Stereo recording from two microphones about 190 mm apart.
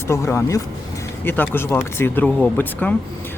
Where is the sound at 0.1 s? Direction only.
15° left (ahead or behind).